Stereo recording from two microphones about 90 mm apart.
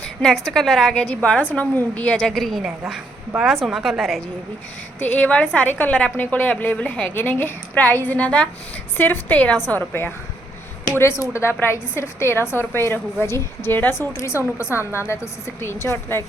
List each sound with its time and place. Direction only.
0.0 s a woman's voice: 5° left (ahead or behind)
4.9 s a woman's voice: 15° left (ahead or behind)
11.2 s a woman's voice: 30° left (ahead or behind)